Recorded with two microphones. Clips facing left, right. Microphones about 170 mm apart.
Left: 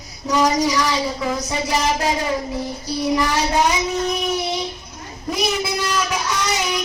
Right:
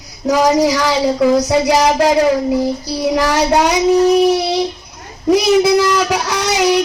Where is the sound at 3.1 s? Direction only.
75° right (ahead or behind).